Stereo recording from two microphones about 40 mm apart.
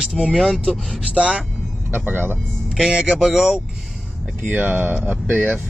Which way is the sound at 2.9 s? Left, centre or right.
Right.